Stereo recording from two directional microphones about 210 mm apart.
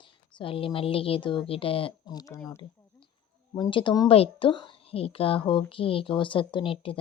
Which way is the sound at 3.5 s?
20° left (ahead or behind).